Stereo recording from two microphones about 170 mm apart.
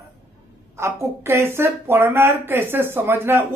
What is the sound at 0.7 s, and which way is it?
A woman's voice, 15° right (ahead or behind).